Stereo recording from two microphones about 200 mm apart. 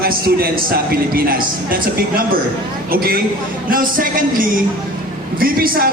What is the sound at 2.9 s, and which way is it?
Speech, 50° right (ahead or behind).